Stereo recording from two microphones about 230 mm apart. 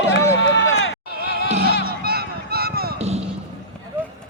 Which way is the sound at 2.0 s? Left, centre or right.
Right.